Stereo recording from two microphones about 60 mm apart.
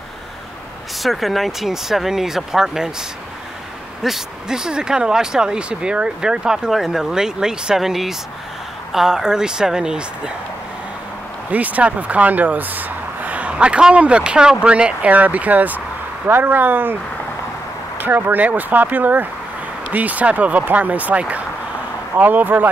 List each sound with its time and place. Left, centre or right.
1.0 s speech: centre
4.0 s speech: centre
11.5 s speech: right